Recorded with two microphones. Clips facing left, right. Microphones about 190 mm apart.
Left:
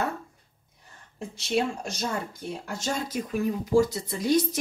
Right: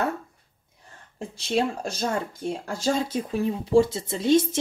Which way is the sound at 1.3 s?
30° right (ahead or behind).